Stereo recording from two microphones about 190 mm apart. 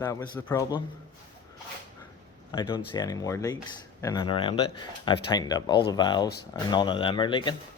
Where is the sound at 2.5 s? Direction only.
20° left (ahead or behind).